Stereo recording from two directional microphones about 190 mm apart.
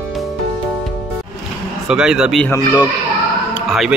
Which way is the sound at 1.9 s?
5° right (ahead or behind).